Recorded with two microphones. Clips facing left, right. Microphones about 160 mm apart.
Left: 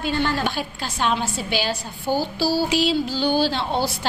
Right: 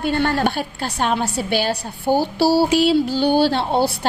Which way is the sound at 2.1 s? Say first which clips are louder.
Right 5 dB; 65° right (ahead or behind).